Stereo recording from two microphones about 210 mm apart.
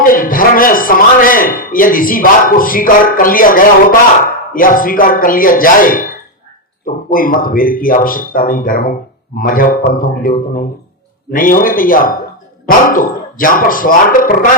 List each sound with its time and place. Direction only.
0.0 s a man's voice: 40° left (ahead or behind)